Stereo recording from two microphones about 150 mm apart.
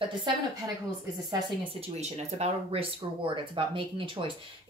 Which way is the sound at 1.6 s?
45° right (ahead or behind).